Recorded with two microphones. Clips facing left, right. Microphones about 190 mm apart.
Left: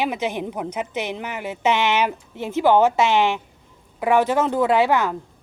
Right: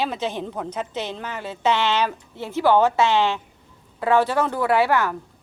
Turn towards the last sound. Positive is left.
turn(degrees=20)  # may be behind; listen again after turning